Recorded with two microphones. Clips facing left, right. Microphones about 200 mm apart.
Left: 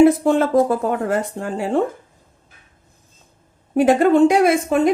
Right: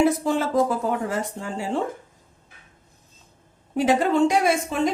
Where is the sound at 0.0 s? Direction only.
55° left (ahead or behind).